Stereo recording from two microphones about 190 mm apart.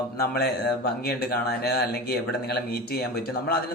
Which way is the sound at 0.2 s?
55° left (ahead or behind).